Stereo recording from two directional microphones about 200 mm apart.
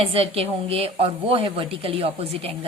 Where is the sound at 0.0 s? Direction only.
30° right (ahead or behind).